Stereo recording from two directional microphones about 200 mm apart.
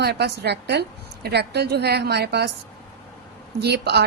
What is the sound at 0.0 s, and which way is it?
Speech, 55° right (ahead or behind).